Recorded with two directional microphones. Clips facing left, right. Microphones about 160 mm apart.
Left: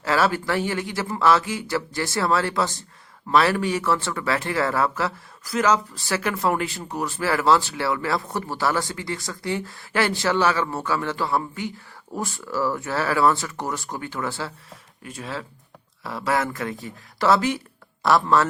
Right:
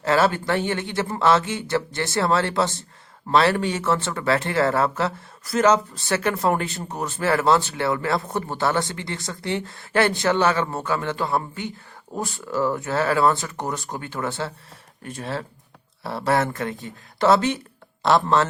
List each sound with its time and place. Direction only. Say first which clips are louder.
0.0 s speech: right 2 dB; 25° right (ahead or behind)